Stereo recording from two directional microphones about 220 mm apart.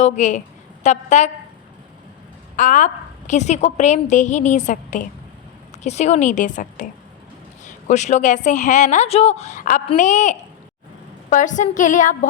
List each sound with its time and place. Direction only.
0.0 s a woman's voice: 35° left (ahead or behind)
2.6 s a woman's voice: 35° left (ahead or behind)